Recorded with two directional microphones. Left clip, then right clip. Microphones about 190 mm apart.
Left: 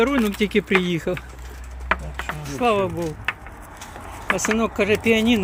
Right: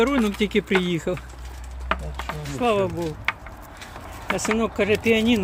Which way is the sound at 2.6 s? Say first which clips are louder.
Left 2 dB; centre (ahead or behind).